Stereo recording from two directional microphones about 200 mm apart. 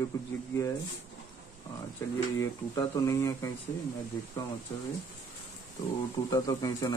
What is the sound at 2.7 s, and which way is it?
Speech, 15° left (ahead or behind).